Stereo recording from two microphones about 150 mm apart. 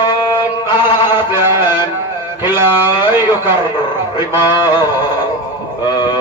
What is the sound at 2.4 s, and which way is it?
Music, 15° right (ahead or behind).